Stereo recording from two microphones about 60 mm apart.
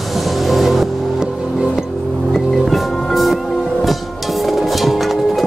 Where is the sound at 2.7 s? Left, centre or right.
Centre.